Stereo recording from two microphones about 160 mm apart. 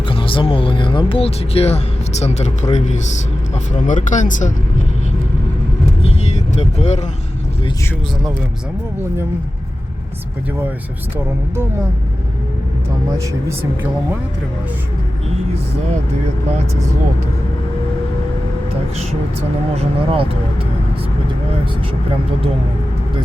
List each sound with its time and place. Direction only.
0.1 s speech: 30° left (ahead or behind); by 4.5 s 50° left (ahead or behind)
6.0 s vehicle: 45° left (ahead or behind)
19.7 s speech: 35° right (ahead or behind)